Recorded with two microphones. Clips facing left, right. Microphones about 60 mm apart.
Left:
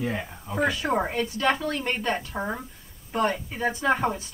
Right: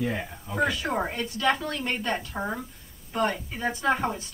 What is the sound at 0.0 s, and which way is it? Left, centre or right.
Speech, centre.